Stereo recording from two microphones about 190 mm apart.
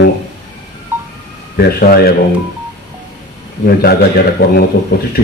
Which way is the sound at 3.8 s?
55° left (ahead or behind).